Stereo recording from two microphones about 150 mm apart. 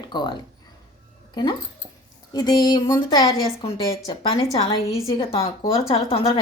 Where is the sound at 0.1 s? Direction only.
30° left (ahead or behind).